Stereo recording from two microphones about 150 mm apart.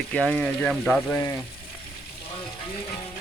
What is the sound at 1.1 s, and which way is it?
Speech, 20° left (ahead or behind).